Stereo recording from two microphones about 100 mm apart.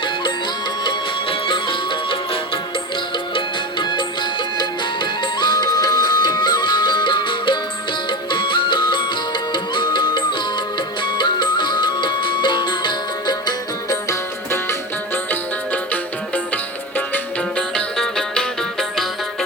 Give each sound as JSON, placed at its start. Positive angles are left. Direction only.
{"t": 0.9, "sound": "music", "side_deg": 55}
{"t": 13.9, "sound": "music", "side_deg": 30}
{"t": 17.7, "sound": "music", "side_deg": 5}